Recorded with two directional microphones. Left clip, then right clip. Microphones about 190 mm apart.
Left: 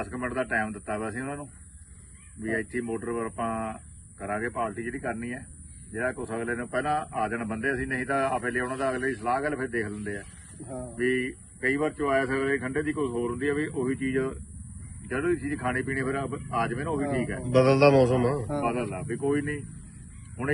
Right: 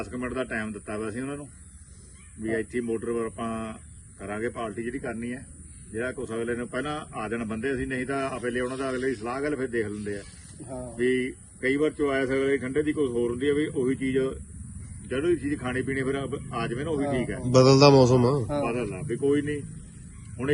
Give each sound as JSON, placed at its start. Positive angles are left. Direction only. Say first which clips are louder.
{"t": 0.0, "sound": "speech", "louder": "left 1 dB", "side_deg": 0}
{"t": 17.5, "sound": "a man's voice", "louder": "right 3 dB", "side_deg": -20}
{"t": 18.6, "sound": "speech", "louder": "even", "side_deg": 0}